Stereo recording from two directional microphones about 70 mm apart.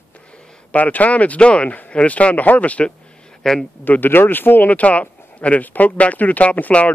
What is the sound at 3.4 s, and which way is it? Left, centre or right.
Speech, centre.